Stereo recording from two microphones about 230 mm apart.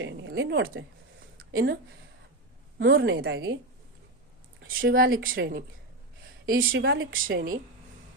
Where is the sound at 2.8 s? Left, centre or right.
Right.